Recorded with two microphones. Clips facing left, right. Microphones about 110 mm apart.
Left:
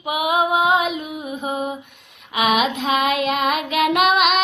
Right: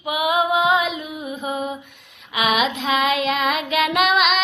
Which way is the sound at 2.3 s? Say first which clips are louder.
Left 2 dB; 45° left (ahead or behind).